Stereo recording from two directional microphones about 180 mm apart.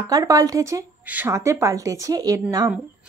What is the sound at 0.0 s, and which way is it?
Speech, 20° right (ahead or behind).